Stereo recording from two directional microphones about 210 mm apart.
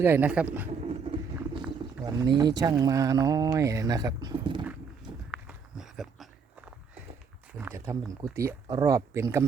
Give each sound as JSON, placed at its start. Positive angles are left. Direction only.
{"t": 0.0, "sound": "speech", "side_deg": -10}
{"t": 0.7, "sound": "vehicle", "side_deg": -30}
{"t": 2.0, "sound": "speech", "side_deg": -15}
{"t": 5.3, "sound": "walk", "side_deg": -5}
{"t": 7.6, "sound": "speech", "side_deg": -15}